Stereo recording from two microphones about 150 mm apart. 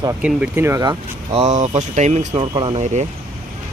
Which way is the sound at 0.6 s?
20° right (ahead or behind).